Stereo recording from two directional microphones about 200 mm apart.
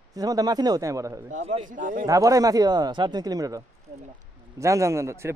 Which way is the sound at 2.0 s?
15° right (ahead or behind).